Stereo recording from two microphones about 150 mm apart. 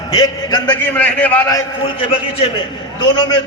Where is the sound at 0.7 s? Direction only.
10° left (ahead or behind).